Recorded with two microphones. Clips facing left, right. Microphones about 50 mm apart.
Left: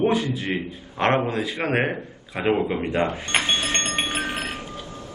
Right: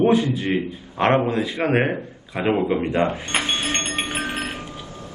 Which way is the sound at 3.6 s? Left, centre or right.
Right.